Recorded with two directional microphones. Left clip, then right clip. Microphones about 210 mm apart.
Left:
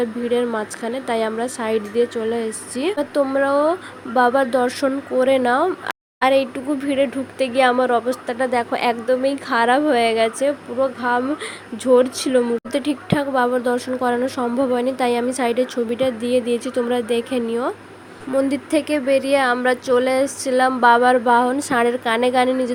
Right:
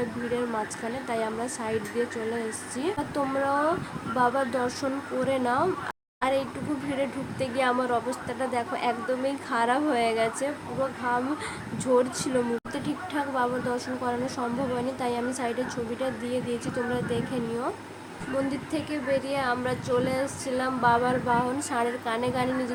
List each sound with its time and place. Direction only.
0.3 s a woman's voice: 30° left (ahead or behind)